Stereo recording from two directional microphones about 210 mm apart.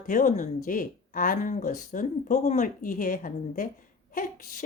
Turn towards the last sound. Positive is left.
turn(degrees=40)  # may be behind; listen again after turning